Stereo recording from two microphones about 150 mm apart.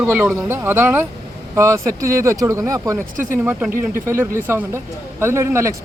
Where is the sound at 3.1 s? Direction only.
60° right (ahead or behind).